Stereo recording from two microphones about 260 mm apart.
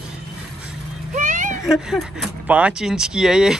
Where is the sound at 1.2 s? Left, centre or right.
Right.